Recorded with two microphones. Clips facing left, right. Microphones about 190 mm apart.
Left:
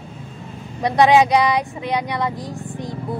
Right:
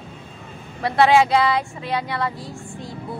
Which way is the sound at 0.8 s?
15° left (ahead or behind).